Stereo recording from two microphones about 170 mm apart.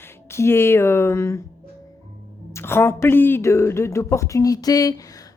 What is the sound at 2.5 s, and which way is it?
A woman's voice, 15° left (ahead or behind).